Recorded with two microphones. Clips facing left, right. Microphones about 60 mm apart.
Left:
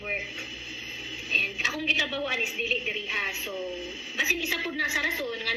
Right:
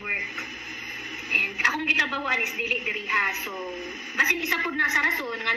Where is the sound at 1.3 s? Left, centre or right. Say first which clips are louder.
Right 4 dB; right.